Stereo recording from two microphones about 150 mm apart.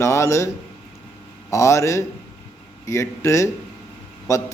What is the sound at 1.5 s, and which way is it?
A man's voice, 20° left (ahead or behind).